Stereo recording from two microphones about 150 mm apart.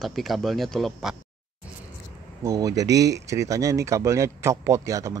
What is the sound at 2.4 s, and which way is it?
Speech, 20° right (ahead or behind).